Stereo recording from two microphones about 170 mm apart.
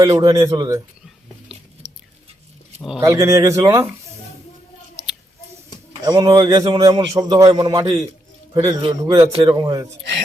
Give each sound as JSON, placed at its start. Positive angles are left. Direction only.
{"t": 0.0, "sound": "a man's voice", "side_deg": -20}
{"t": 1.0, "sound": "biting", "side_deg": -5}
{"t": 3.0, "sound": "speech", "side_deg": -20}
{"t": 6.1, "sound": "a man's voice", "side_deg": -25}